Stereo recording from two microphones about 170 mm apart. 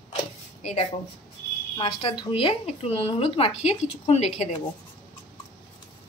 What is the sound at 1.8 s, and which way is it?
Speech, 30° left (ahead or behind).